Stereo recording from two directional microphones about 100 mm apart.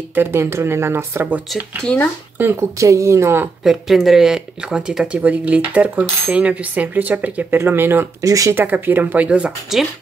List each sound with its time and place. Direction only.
0.1 s speech: 20° right (ahead or behind)
2.8 s speech: 30° right (ahead or behind)
3.6 s speech: 5° right (ahead or behind); by 8.3 s 25° right (ahead or behind)
8.3 s speech: 35° right (ahead or behind)
8.5 s speech: 20° right (ahead or behind)